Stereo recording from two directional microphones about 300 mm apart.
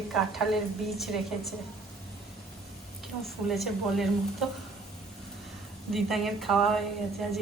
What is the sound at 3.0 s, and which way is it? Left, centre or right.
A woman's voice, centre.